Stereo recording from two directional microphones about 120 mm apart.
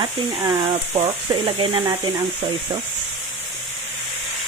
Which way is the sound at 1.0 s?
50° right (ahead or behind).